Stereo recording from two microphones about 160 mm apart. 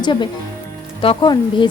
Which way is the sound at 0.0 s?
30° left (ahead or behind).